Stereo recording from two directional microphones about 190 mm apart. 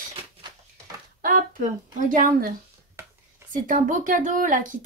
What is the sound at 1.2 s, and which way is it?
Speech, 45° right (ahead or behind).